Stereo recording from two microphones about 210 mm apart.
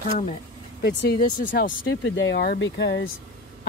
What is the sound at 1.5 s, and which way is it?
Speech, 50° left (ahead or behind).